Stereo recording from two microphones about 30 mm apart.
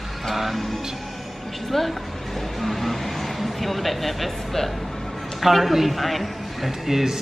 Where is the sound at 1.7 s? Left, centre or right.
Centre.